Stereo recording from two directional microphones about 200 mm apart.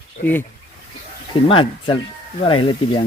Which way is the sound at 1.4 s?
25° left (ahead or behind).